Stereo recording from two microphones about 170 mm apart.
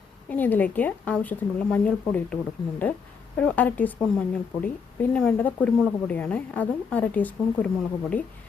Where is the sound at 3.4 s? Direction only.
10° left (ahead or behind).